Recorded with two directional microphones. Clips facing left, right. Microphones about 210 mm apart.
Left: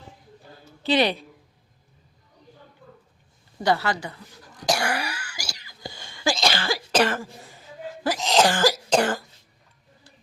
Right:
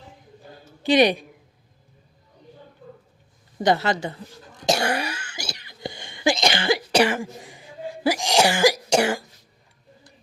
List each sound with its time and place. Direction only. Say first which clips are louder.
0.8 s a woman's voice: right 4 dB; 15° right (ahead or behind)
3.6 s cough: right 3 dB; 20° right (ahead or behind)